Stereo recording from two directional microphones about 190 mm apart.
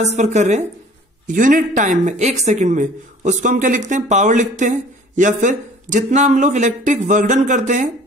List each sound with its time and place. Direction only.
0.0 s speech: 35° right (ahead or behind)